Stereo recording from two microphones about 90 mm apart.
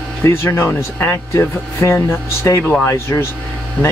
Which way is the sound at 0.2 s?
30° left (ahead or behind).